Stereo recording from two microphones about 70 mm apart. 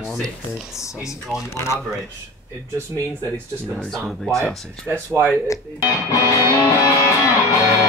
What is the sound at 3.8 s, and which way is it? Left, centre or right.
Speech, centre.